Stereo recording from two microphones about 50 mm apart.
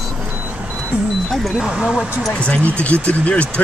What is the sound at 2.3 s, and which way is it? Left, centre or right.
Speech, left.